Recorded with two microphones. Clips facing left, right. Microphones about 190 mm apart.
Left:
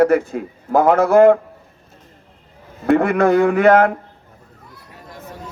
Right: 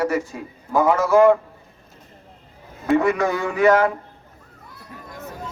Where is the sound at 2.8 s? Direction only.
60° left (ahead or behind).